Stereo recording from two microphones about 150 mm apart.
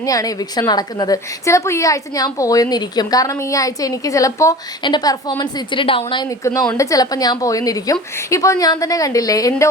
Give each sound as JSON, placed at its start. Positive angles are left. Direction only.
{"t": 0.0, "sound": "a woman's voice", "side_deg": 25}
{"t": 6.2, "sound": "a woman's voice", "side_deg": 20}